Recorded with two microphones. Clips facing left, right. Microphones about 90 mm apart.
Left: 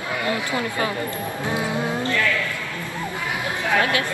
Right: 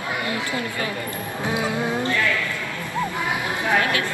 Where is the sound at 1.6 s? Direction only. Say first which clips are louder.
Right 1 dB; 20° right (ahead or behind).